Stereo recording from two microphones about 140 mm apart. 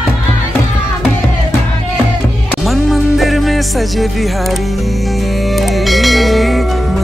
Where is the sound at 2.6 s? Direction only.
Centre (ahead or behind).